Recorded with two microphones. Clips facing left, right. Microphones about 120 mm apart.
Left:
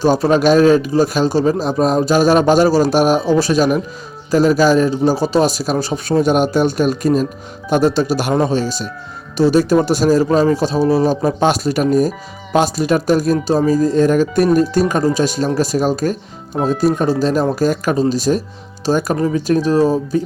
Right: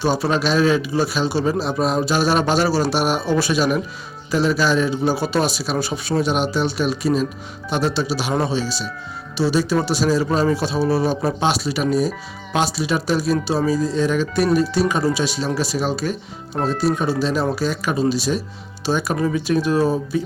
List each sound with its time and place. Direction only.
0.0 s speech: 45° left (ahead or behind)
10.2 s speech: 35° left (ahead or behind)
16.5 s speech: 10° left (ahead or behind)
17.0 s speech: 40° left (ahead or behind)